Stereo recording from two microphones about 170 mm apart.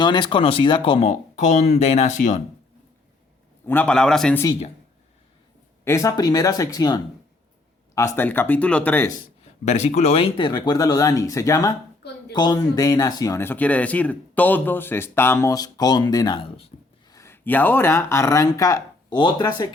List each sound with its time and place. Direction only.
0.0 s speech: 25° left (ahead or behind); by 2.4 s 45° left (ahead or behind)
3.7 s a man's voice: 10° left (ahead or behind)
5.8 s speech: 15° left (ahead or behind)
9.4 s speech: 40° left (ahead or behind)
17.1 s speech: 15° left (ahead or behind)